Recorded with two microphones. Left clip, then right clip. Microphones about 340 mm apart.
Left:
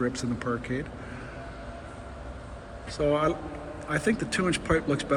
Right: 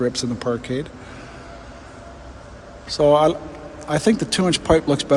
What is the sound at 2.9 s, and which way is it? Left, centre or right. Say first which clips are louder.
A man's voice: right 11 dB; centre.